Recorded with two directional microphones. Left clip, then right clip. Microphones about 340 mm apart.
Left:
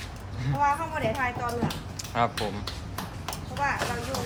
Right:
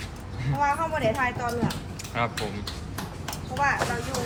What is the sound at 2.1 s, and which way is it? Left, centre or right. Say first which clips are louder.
Mechanisms: left 2 dB; centre.